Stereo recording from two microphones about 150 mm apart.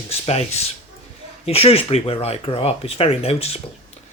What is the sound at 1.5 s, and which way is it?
Speech, 40° left (ahead or behind).